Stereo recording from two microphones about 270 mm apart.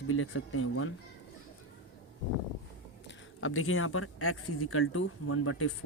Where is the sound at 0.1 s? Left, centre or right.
Left.